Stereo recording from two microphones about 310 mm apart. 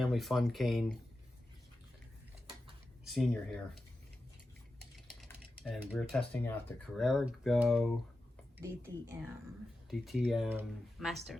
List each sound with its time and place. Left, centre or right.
0.0 s speech: centre
3.1 s speech: centre
5.6 s speech: centre